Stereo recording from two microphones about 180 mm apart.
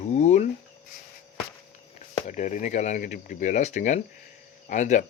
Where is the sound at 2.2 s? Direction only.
40° left (ahead or behind).